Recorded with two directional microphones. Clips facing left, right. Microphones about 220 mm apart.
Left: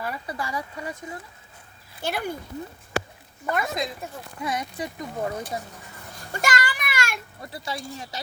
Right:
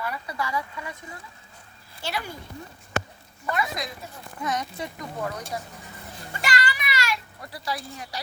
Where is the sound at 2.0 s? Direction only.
55° left (ahead or behind).